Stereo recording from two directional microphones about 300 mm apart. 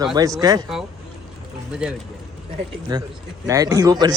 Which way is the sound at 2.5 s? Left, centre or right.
Centre.